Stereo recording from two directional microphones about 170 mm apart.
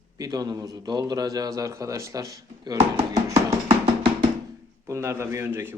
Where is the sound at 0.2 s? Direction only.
20° right (ahead or behind).